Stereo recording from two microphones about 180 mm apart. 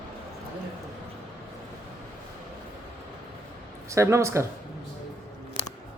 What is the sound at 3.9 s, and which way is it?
Speech, 15° right (ahead or behind).